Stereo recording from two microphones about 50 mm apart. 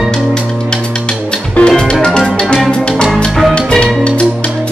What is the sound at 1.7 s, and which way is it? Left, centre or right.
Music, centre.